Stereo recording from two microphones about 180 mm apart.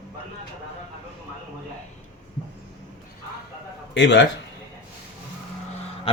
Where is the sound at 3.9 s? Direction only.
85° left.